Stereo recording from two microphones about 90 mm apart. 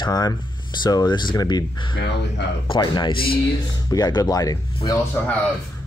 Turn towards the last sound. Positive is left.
turn(degrees=20)  # may be behind; listen again after turning